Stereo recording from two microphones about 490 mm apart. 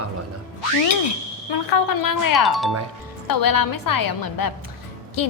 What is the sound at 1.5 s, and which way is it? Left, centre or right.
Speech, left.